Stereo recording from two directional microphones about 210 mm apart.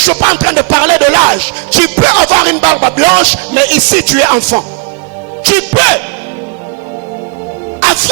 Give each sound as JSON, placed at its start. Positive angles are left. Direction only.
{"t": 0.0, "sound": "music", "side_deg": -10}
{"t": 7.8, "sound": "music", "side_deg": -10}